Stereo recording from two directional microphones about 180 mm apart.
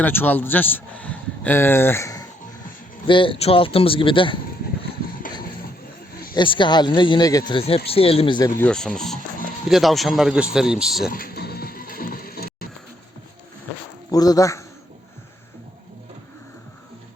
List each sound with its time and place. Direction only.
0.0 s a man's voice: 10° left (ahead or behind)
3.1 s speech: 30° left (ahead or behind)
5.2 s a sound: 50° left (ahead or behind)
6.3 s speech: 25° left (ahead or behind)
8.6 s speech: 5° left (ahead or behind)
11.1 s music: 55° left (ahead or behind)
14.1 s speech: 20° left (ahead or behind)